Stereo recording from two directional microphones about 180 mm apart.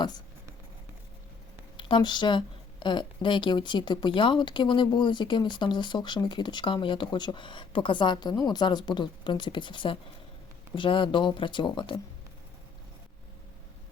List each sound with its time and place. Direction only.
1.7 s speech: 25° left (ahead or behind)